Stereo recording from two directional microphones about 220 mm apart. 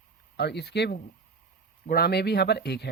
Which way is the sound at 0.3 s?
50° left (ahead or behind).